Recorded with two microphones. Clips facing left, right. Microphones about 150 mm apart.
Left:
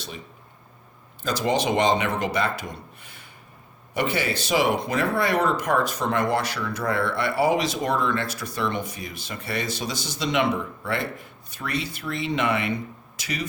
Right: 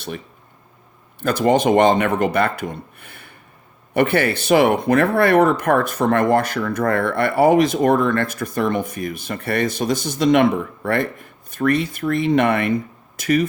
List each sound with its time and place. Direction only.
1.2 s speech: 55° right (ahead or behind)